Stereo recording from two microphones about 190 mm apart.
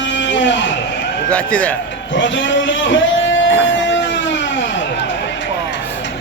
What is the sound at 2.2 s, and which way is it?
A man's voice, 80° left.